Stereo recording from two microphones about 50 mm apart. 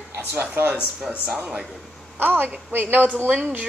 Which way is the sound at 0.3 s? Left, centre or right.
Right.